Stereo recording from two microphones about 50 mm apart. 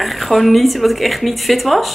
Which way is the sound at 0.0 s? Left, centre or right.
Centre.